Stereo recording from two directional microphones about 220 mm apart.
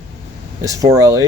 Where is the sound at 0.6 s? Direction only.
15° right (ahead or behind).